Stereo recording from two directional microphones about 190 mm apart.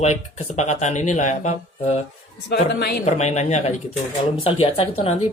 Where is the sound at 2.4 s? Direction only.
60° left (ahead or behind).